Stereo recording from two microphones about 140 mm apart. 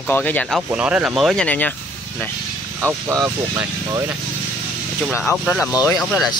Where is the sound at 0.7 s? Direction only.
10° right (ahead or behind).